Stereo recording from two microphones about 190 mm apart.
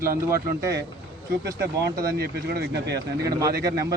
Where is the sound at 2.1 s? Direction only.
55° right (ahead or behind).